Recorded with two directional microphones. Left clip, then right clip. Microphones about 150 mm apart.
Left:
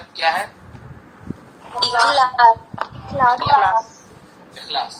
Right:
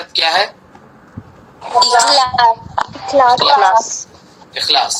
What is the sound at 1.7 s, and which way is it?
A man's voice, 90° right.